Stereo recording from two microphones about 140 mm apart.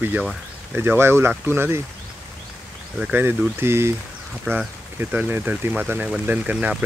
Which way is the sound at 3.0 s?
10° right (ahead or behind).